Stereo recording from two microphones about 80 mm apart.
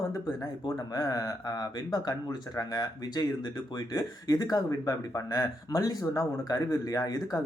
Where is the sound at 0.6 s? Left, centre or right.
Left.